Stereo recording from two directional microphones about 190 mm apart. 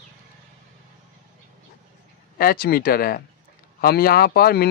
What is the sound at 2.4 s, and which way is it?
Speech, 50° left (ahead or behind).